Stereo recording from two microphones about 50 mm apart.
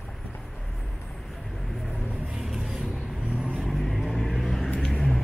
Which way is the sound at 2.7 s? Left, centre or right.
Right.